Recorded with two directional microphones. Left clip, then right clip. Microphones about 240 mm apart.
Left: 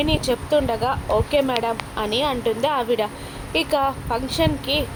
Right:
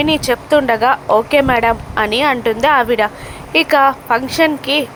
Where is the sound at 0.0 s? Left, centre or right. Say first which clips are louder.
Right 7 dB; centre.